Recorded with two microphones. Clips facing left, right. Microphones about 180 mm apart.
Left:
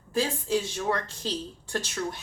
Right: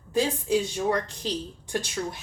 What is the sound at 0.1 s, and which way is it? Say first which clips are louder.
A woman's voice: right 3 dB; 15° right (ahead or behind).